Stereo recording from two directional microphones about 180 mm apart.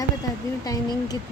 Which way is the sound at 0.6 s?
20° left (ahead or behind).